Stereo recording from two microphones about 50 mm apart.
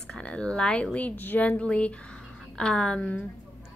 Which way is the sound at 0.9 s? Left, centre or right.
Left.